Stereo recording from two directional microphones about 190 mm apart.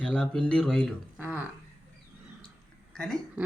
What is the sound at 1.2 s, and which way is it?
Speech, 10° right (ahead or behind).